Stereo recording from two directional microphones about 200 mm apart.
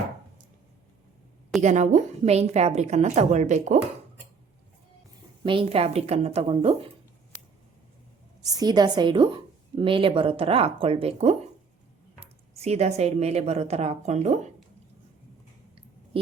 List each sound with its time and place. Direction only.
1.6 s a woman's voice: 35° right (ahead or behind)
5.4 s a woman's voice: 25° right (ahead or behind)
8.4 s a woman's voice: 20° right (ahead or behind); by 14.5 s 35° right (ahead or behind)